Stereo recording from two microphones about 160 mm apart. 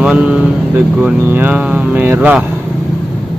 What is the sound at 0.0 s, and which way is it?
Speech, 5° right (ahead or behind).